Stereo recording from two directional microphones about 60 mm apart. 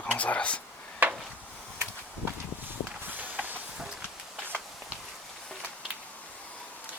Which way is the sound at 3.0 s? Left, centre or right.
Right.